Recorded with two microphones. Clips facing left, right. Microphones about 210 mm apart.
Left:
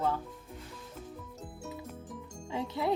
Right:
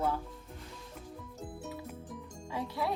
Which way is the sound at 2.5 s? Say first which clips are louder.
Left 3 dB; 25° left (ahead or behind).